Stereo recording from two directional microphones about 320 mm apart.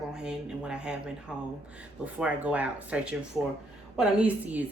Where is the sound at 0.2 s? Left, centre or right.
Centre.